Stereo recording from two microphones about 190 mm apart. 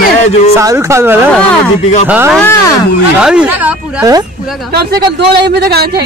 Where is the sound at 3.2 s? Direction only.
5° right (ahead or behind).